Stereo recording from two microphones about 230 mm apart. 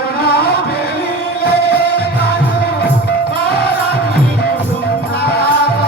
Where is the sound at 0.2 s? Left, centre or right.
Left.